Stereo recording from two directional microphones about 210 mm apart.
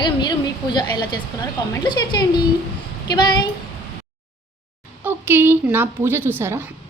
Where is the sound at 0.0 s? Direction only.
20° left (ahead or behind).